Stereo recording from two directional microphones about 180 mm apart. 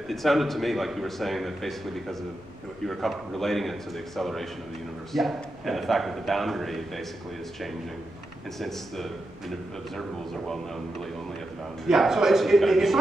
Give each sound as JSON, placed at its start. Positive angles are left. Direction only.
{"t": 0.1, "sound": "speech", "side_deg": 0}
{"t": 8.5, "sound": "speech", "side_deg": 0}